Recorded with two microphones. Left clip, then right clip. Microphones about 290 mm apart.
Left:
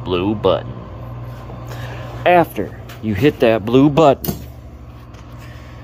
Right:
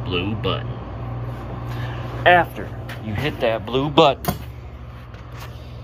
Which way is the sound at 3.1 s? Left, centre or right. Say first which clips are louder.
Left 8 dB; left.